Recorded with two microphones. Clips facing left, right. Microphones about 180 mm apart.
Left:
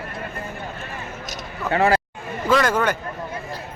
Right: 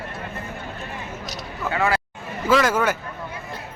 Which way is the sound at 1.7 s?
35° left (ahead or behind).